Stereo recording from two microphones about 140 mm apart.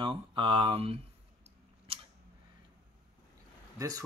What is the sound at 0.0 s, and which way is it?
Speech, 35° right (ahead or behind).